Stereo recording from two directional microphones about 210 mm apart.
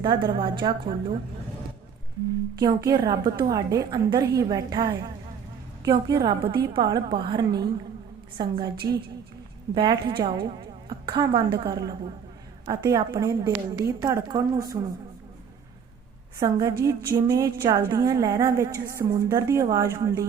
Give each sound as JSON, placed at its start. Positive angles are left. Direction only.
{"t": 0.0, "sound": "a woman's voice", "side_deg": -20}
{"t": 2.6, "sound": "a woman's voice", "side_deg": -20}
{"t": 9.7, "sound": "a woman's voice", "side_deg": -25}
{"t": 16.4, "sound": "a woman's voice", "side_deg": -20}